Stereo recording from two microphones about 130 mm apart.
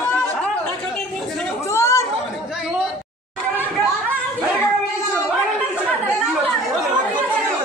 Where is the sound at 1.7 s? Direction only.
20° left (ahead or behind).